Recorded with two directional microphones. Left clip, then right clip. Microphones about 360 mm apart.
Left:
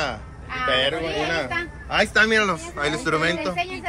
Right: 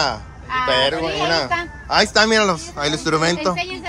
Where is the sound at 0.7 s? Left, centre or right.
Centre.